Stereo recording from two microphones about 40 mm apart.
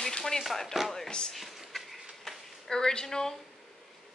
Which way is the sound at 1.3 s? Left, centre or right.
Centre.